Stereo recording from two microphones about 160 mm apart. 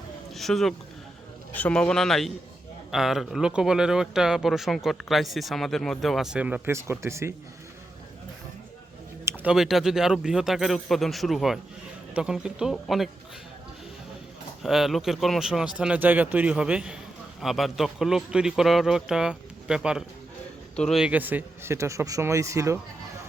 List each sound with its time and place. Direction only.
0.3 s speech: centre (ahead or behind); by 7.3 s 15° right (ahead or behind)
9.2 s speech: 10° right (ahead or behind)
14.6 s speech: centre (ahead or behind); by 22.8 s 20° right (ahead or behind)